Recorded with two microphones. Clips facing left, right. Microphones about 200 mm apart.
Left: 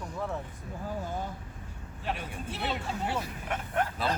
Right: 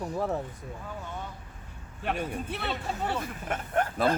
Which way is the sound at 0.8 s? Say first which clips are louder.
Left 6 dB; 35° left (ahead or behind).